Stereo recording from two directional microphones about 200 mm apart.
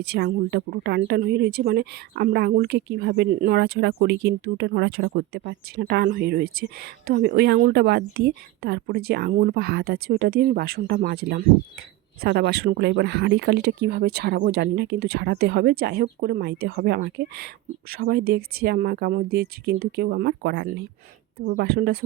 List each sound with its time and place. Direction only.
0.0 s speech: 55° right (ahead or behind)